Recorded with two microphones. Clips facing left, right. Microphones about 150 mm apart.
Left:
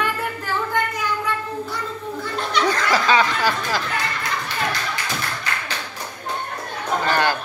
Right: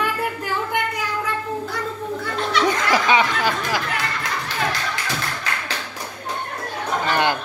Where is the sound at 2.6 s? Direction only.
20° right (ahead or behind).